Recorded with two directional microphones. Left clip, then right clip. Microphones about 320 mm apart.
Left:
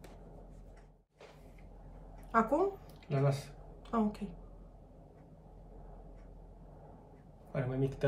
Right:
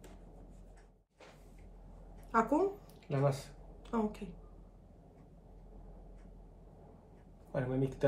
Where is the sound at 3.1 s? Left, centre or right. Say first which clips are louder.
Right 1 dB; centre.